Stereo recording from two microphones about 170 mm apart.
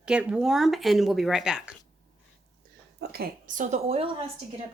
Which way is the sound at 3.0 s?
65° right (ahead or behind).